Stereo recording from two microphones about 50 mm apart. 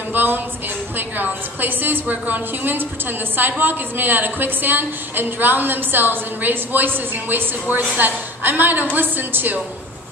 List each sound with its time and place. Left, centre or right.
0.1 s a woman's voice: right